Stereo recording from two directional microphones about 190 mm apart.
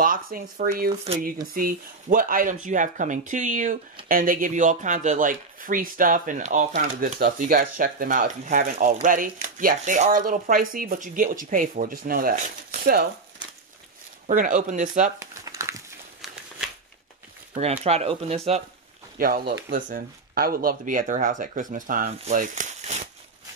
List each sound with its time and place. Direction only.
0.0 s speech: 50° right (ahead or behind)
14.2 s speech: 45° right (ahead or behind)
15.1 s crumpling: 15° right (ahead or behind)
16.2 s a sound: centre (ahead or behind)
17.8 s speech: 35° right (ahead or behind)
19.1 s speech: 50° right (ahead or behind)